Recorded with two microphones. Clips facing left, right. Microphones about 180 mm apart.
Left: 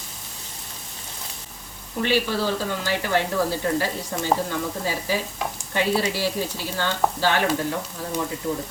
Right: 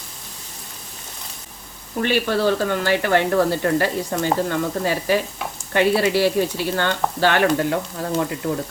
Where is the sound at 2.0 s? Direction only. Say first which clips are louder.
Right 4 dB; 60° right (ahead or behind).